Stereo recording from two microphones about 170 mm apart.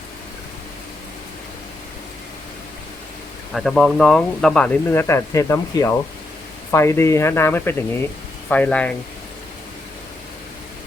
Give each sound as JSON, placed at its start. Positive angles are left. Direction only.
{"t": 3.5, "sound": "speech", "side_deg": 0}